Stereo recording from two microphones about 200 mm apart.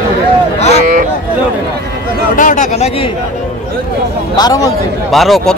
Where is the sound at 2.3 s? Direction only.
40° left (ahead or behind).